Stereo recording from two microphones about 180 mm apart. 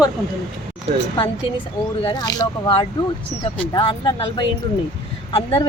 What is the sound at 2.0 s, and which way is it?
A woman's voice, 20° left (ahead or behind).